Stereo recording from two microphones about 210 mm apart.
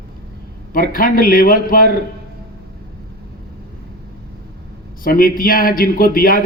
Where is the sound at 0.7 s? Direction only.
40° left (ahead or behind).